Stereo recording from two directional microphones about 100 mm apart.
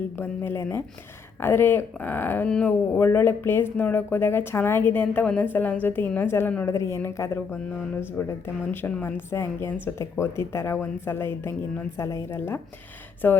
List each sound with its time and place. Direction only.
0.2 s speech: 25° left (ahead or behind)
8.3 s speech: 20° left (ahead or behind)